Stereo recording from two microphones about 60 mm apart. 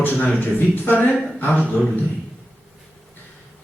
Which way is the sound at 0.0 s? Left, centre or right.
Left.